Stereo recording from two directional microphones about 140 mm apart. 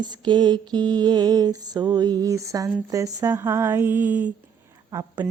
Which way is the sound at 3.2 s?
20° right (ahead or behind).